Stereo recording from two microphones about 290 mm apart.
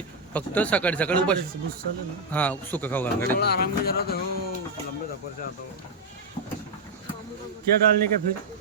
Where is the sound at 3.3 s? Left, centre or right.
Left.